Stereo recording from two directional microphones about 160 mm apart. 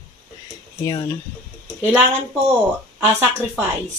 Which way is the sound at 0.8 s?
20° left (ahead or behind).